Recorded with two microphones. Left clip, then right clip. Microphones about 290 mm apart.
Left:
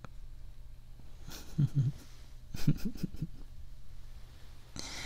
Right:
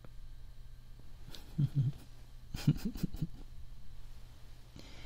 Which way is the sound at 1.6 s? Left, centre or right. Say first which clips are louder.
Left 3 dB; centre.